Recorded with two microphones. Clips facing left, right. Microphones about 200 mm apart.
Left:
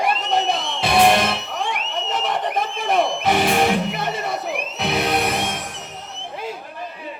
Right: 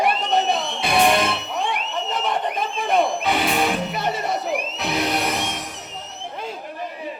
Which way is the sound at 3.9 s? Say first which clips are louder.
Right 1 dB; 55° left (ahead or behind).